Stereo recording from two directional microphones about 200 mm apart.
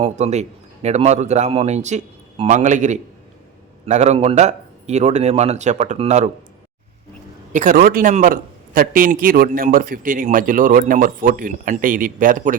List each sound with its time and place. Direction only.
0.0 s a man's voice: 35° right (ahead or behind)
7.5 s a man's voice: 45° right (ahead or behind)